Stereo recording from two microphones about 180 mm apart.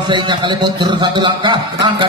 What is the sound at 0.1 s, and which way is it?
Speech, 25° right (ahead or behind).